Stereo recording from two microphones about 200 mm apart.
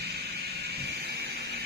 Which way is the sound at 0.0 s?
55° right (ahead or behind).